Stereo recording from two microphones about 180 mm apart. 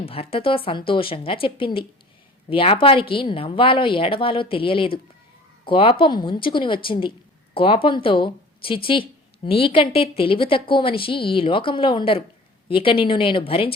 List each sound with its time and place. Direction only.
0.0 s speech: 30° left (ahead or behind)